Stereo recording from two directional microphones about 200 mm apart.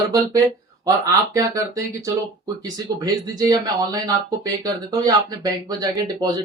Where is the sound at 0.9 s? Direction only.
15° right (ahead or behind).